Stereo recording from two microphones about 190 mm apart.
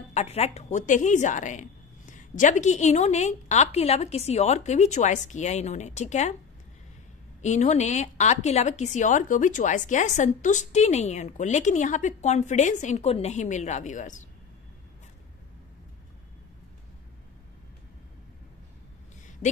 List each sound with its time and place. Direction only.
0.1 s a woman's voice: 35° left (ahead or behind)
7.4 s a woman's voice: 40° left (ahead or behind)